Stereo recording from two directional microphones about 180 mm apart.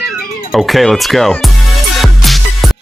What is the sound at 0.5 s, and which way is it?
Speech, centre (ahead or behind).